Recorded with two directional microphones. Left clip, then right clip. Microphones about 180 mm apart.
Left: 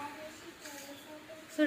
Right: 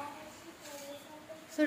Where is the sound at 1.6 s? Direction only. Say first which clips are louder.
Left 1 dB; 35° right (ahead or behind).